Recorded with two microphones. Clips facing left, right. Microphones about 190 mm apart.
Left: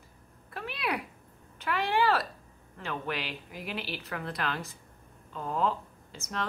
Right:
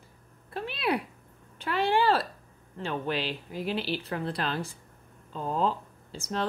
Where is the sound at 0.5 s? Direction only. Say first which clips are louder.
Right 5 dB; 30° right (ahead or behind).